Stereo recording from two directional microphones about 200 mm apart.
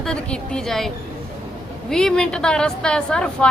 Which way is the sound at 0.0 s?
5° left (ahead or behind).